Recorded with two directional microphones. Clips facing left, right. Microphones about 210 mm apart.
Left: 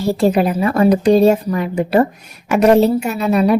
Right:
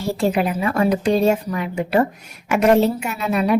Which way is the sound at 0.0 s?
35° left (ahead or behind).